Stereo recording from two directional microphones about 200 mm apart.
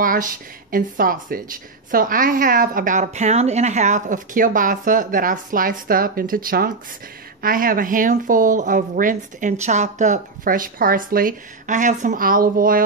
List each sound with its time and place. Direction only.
0.0 s speech: 45° right (ahead or behind)